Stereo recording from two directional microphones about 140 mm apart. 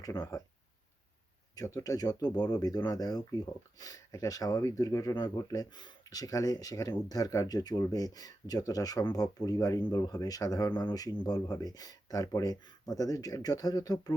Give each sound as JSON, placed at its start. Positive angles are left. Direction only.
{"t": 0.0, "sound": "speech", "side_deg": 25}
{"t": 1.5, "sound": "speech", "side_deg": 25}